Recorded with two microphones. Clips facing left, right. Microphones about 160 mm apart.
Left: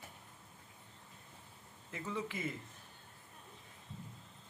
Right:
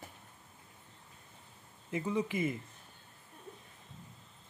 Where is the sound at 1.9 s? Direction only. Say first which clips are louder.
Right 8 dB; 15° right (ahead or behind).